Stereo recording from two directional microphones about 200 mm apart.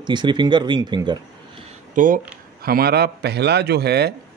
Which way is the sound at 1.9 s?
40° right (ahead or behind).